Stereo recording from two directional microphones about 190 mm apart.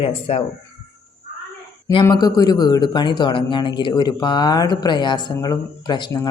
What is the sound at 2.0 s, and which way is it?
Speech, 20° left (ahead or behind).